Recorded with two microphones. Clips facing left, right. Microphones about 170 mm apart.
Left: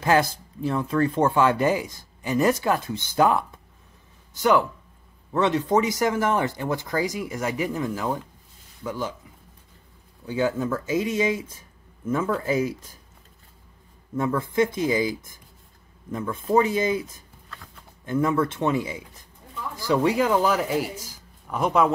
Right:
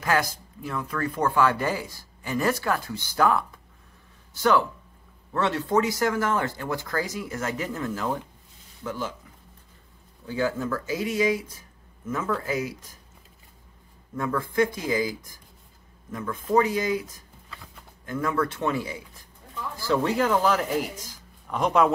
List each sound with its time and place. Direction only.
0.0 s speech: 25° left (ahead or behind)
10.2 s speech: 20° left (ahead or behind)
14.1 s speech: 20° left (ahead or behind)
18.0 s speech: 25° left (ahead or behind); by 21.9 s 5° left (ahead or behind)